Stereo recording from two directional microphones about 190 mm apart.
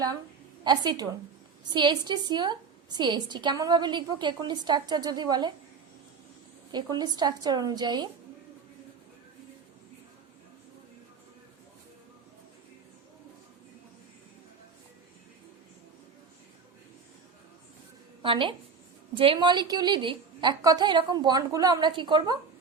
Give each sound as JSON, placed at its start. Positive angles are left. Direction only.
{"t": 0.6, "sound": "a woman's voice", "side_deg": -20}
{"t": 6.7, "sound": "a woman's voice", "side_deg": -20}
{"t": 18.2, "sound": "a woman's voice", "side_deg": -25}